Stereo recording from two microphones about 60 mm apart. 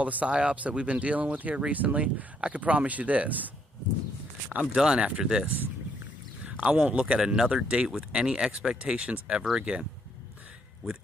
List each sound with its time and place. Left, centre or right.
0.0 s speech: right
6.4 s speech: right